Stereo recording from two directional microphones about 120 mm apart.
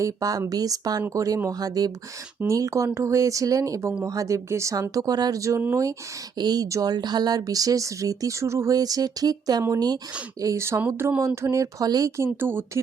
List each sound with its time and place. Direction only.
0.0 s speech: 30° right (ahead or behind)